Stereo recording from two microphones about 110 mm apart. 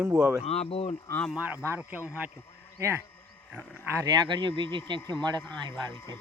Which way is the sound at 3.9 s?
40° right (ahead or behind).